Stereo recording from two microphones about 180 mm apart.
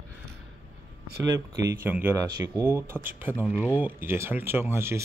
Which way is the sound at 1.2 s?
20° right (ahead or behind).